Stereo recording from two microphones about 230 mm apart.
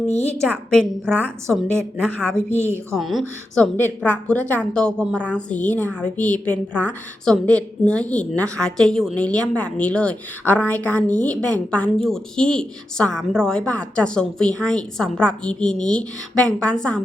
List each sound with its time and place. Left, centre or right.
0.1 s a woman's voice: left
0.4 s a woman's voice: centre